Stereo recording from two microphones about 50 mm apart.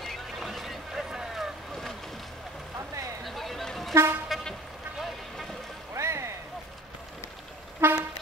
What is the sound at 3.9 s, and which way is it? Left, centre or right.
Vehicle, right.